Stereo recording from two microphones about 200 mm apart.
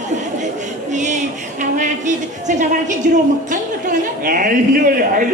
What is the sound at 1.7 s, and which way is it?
A man's voice, 40° right (ahead or behind).